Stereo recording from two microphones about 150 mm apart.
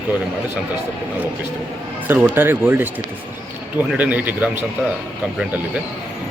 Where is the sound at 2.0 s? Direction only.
10° right (ahead or behind).